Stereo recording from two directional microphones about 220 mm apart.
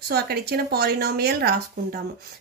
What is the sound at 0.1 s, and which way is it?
A woman's voice, 45° right (ahead or behind).